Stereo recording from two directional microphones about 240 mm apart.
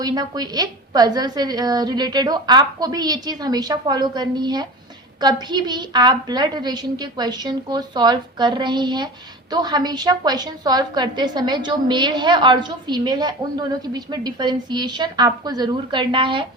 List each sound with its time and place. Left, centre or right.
0.0 s a woman's voice: centre